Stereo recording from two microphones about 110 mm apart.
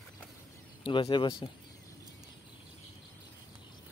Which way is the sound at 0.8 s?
45° left (ahead or behind).